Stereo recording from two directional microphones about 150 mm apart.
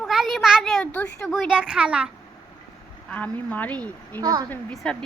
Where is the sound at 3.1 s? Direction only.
10° left (ahead or behind).